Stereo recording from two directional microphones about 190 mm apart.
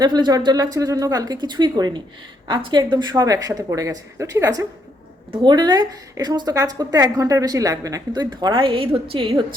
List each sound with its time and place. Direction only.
0.0 s a woman's voice: 20° right (ahead or behind)